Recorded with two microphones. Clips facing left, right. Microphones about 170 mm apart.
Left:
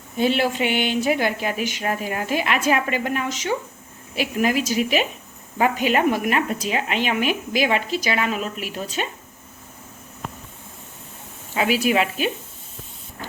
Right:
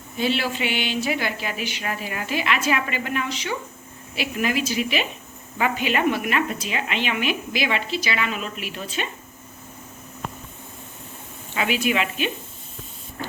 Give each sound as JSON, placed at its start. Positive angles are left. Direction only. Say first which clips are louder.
{"t": 0.2, "sound": "a woman's voice", "louder": "left 4 dB", "side_deg": 50}
{"t": 11.5, "sound": "a woman's voice", "louder": "left 3 dB", "side_deg": 40}